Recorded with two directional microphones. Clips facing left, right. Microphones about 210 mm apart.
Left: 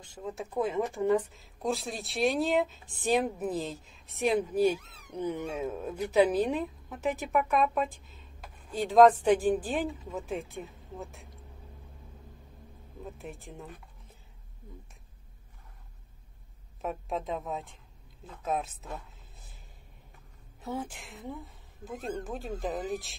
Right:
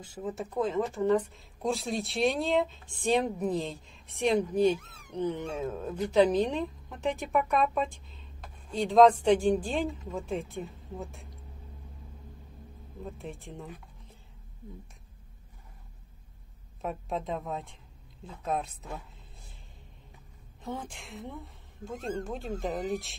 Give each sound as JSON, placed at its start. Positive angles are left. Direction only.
{"t": 0.0, "sound": "a woman's voice", "side_deg": -5}
{"t": 4.7, "sound": "speech", "side_deg": -50}
{"t": 5.1, "sound": "a woman's voice", "side_deg": 10}
{"t": 13.0, "sound": "a woman's voice", "side_deg": 0}
{"t": 16.8, "sound": "a woman's voice", "side_deg": 0}
{"t": 20.6, "sound": "a woman's voice", "side_deg": 5}